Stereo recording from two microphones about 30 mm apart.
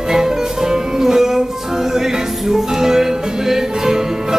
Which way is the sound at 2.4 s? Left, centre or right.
Centre.